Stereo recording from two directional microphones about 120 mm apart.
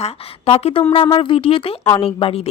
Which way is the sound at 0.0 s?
55° left (ahead or behind).